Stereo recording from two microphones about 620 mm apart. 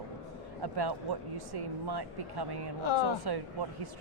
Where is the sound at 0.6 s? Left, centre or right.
Right.